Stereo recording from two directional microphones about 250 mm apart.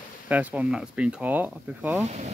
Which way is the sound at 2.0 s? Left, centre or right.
Right.